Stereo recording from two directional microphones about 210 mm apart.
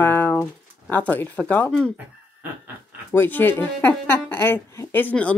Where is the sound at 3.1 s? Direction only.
10° left (ahead or behind).